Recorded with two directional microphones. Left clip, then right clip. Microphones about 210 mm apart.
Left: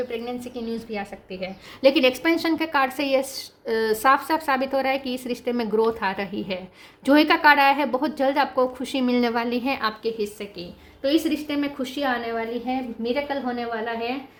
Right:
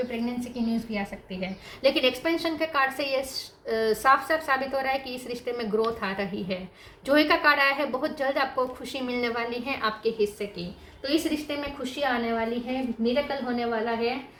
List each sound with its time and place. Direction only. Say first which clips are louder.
0.3 s a woman's voice: even; 40° left (ahead or behind)